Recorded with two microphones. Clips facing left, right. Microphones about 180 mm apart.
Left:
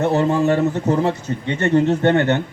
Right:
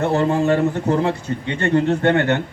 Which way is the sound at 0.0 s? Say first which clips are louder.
Left 1 dB; 20° left (ahead or behind).